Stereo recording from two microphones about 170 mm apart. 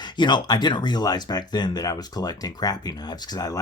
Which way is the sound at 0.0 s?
25° left (ahead or behind).